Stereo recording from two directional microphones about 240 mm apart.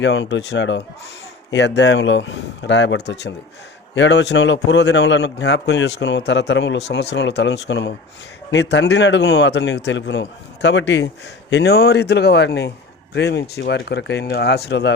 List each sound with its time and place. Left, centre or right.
0.0 s speech: left